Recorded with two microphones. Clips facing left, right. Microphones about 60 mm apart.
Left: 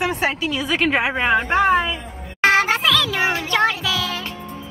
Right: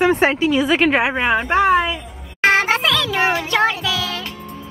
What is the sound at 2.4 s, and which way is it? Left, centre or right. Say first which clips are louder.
Music: right 1 dB; centre.